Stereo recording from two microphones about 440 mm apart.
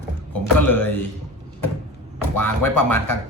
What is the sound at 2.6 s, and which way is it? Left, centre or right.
Speech, left.